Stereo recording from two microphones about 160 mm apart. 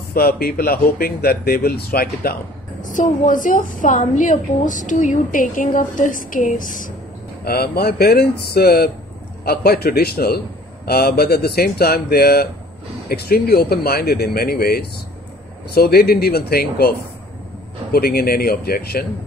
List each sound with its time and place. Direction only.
0.1 s speech: 70° left (ahead or behind)
2.9 s a woman's voice: 55° left (ahead or behind)
7.4 s speech: 80° left
17.9 s speech: 70° left (ahead or behind)